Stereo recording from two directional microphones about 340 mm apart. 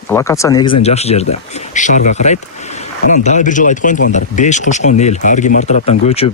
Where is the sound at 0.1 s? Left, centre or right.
Centre.